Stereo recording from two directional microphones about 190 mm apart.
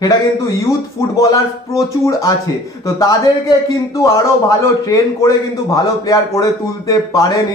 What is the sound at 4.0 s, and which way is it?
A man's voice, 15° left (ahead or behind).